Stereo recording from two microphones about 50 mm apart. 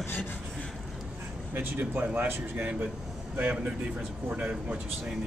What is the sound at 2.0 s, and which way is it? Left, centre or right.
Speech, right.